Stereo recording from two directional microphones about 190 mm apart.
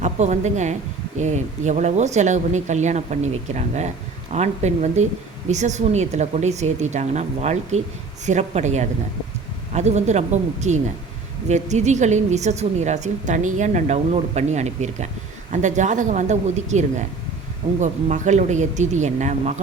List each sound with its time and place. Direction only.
0.0 s a woman's voice: 40° right (ahead or behind)